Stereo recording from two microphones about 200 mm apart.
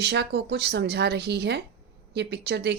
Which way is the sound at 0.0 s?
55° right (ahead or behind).